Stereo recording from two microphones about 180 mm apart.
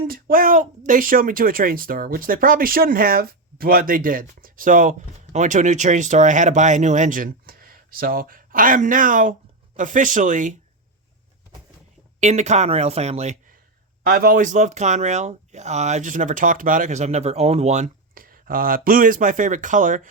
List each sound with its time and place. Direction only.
0.1 s speech: 50° right (ahead or behind)
12.2 s speech: 40° right (ahead or behind)
14.0 s speech: 55° right (ahead or behind)